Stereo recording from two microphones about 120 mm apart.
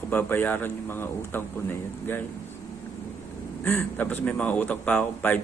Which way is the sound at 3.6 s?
15° left (ahead or behind).